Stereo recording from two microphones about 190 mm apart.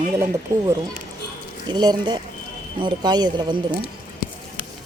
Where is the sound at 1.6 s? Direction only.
20° right (ahead or behind).